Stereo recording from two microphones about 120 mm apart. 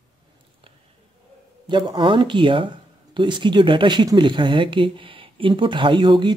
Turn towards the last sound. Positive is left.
turn(degrees=-40)  # may be behind; listen again after turning